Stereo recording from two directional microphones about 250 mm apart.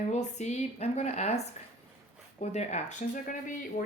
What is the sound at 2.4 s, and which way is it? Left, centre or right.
A woman's voice, left.